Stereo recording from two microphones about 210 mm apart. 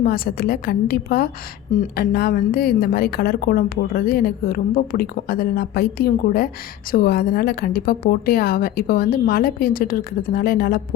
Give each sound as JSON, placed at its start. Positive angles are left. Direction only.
{"t": 0.0, "sound": "a woman's voice", "side_deg": 45}